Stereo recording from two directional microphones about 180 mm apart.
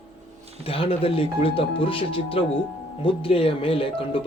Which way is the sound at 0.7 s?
30° left (ahead or behind).